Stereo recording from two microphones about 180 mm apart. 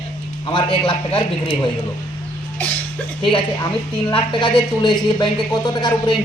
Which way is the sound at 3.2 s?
30° left (ahead or behind).